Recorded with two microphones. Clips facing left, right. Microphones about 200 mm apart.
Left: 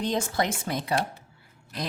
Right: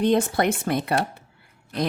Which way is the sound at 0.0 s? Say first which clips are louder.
Right 7 dB; 60° right (ahead or behind).